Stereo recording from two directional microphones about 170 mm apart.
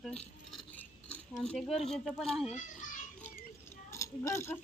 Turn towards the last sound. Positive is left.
turn(degrees=15)  # may be behind; listen again after turning